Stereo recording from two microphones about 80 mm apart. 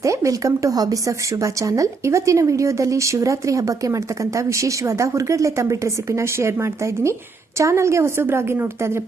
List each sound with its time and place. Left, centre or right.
0.0 s speech: right